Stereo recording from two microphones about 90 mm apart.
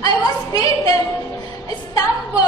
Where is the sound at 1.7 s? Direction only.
40° left (ahead or behind).